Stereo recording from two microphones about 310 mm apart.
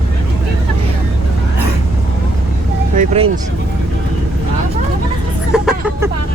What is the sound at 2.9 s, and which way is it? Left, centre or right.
Vehicle, centre.